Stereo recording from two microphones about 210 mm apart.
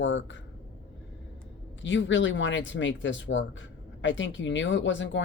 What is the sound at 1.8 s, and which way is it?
Speech, 60° left (ahead or behind).